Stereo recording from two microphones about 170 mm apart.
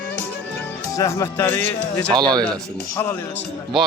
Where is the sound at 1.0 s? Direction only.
15° left (ahead or behind).